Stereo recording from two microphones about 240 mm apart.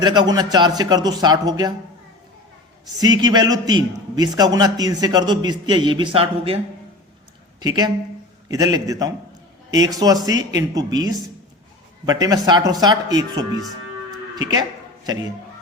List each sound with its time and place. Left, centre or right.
0.0 s a man's voice: centre
3.0 s a man's voice: centre
7.6 s a man's voice: centre
10.2 s a man's voice: centre
14.5 s a sound: centre